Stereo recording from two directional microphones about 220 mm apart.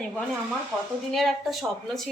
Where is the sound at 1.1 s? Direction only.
Centre (ahead or behind).